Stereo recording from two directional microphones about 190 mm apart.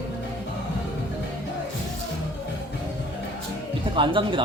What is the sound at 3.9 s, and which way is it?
Speech, 25° right (ahead or behind).